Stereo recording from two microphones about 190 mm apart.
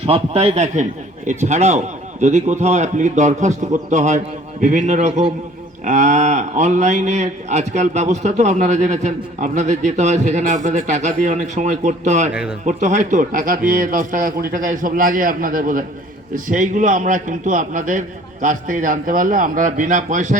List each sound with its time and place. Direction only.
0.0 s speech: 30° right (ahead or behind)
12.3 s speech: 5° right (ahead or behind)
12.6 s a man's voice: 40° right (ahead or behind)